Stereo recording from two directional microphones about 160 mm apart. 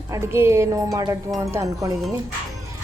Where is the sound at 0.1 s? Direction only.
15° right (ahead or behind).